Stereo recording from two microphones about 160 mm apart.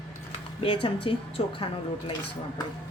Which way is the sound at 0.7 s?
30° left (ahead or behind).